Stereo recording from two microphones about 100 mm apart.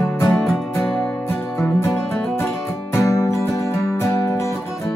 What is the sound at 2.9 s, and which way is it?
Music, 30° left (ahead or behind).